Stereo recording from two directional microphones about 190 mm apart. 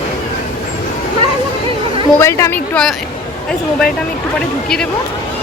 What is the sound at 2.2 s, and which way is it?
Speech, 15° left (ahead or behind).